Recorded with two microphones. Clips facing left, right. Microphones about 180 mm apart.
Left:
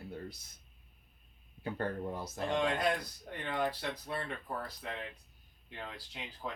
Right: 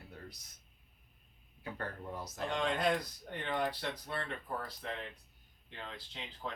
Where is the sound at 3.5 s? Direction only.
5° left (ahead or behind).